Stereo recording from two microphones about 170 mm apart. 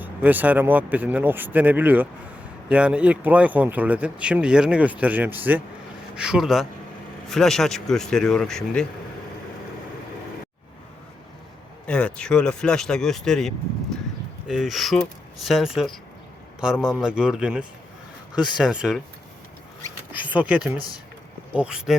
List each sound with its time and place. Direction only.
0.0 s speech: 10° right (ahead or behind)
11.9 s speech: 5° left (ahead or behind)
20.3 s speech: 10° right (ahead or behind)